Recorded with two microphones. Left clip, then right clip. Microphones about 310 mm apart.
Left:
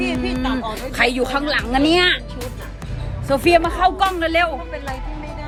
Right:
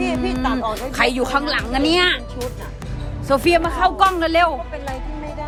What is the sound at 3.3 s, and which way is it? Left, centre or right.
Speech, centre.